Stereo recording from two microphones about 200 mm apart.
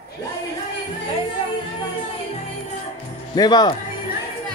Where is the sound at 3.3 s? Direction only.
20° left (ahead or behind).